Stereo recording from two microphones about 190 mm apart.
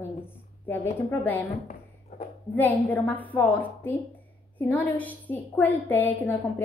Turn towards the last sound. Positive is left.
turn(degrees=10)  # may be behind; listen again after turning